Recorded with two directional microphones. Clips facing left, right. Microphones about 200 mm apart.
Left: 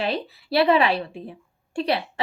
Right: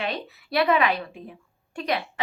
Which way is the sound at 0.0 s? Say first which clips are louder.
Left 4 dB; 30° left (ahead or behind).